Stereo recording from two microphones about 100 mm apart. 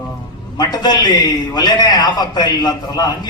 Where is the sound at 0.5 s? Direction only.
45° left (ahead or behind).